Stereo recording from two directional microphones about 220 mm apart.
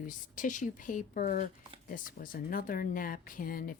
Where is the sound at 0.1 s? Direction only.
35° left (ahead or behind).